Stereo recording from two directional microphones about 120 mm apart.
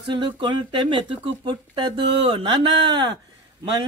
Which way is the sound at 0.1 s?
40° right (ahead or behind).